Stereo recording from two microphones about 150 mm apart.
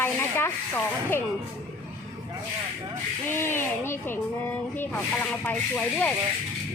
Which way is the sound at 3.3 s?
15° left (ahead or behind).